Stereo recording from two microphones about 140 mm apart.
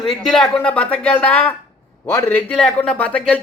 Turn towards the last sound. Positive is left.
turn(degrees=10)  # may be behind; listen again after turning